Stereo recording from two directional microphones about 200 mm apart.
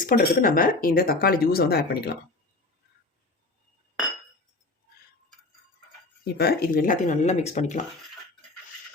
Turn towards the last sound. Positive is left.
turn(degrees=35)  # may be behind; listen again after turning